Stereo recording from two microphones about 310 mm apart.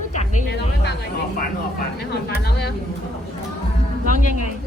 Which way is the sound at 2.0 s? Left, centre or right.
Left.